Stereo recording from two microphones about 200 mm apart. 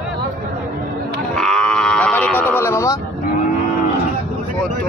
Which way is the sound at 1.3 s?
5° left (ahead or behind).